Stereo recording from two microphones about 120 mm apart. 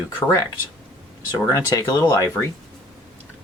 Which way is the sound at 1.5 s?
30° left (ahead or behind).